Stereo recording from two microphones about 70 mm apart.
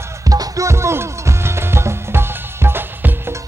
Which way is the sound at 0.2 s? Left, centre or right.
Right.